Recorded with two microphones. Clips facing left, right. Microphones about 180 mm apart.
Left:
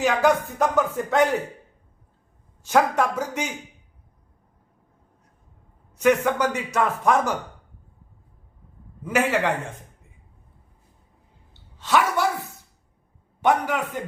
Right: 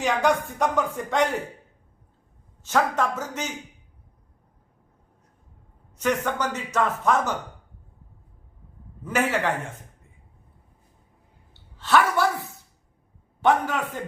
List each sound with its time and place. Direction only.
0.0 s speech: centre (ahead or behind)
2.6 s a man's voice: 10° left (ahead or behind)
6.0 s a man's voice: 10° left (ahead or behind)
9.0 s a man's voice: 10° left (ahead or behind)
11.8 s a woman's voice: 15° left (ahead or behind)
13.4 s a man's voice: 15° left (ahead or behind)